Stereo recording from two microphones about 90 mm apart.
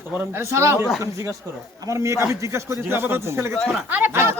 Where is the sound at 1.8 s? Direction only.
35° right (ahead or behind).